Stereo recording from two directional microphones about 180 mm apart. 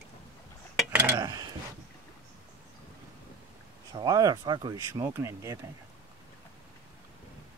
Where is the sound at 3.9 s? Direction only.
20° right (ahead or behind).